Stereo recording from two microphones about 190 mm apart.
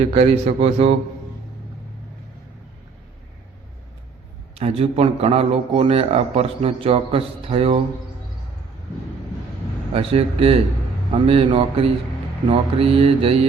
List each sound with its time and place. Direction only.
0.1 s speech: 35° right (ahead or behind)
4.5 s speech: 30° right (ahead or behind)
9.9 s speech: 30° right (ahead or behind)
11.1 s mantra: 30° right (ahead or behind)